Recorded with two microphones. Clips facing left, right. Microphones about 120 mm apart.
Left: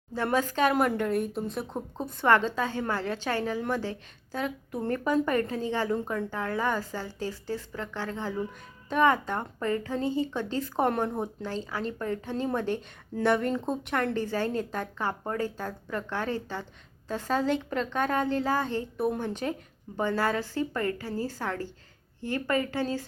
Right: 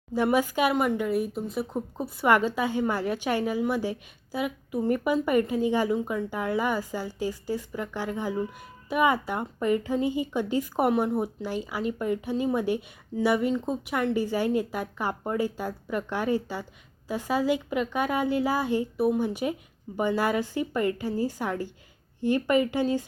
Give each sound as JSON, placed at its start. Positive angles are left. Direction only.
{"t": 0.1, "sound": "a woman's voice", "side_deg": -10}
{"t": 0.7, "sound": "a woman's voice", "side_deg": 0}
{"t": 6.0, "sound": "speech", "side_deg": 0}
{"t": 6.3, "sound": "a woman's voice", "side_deg": -15}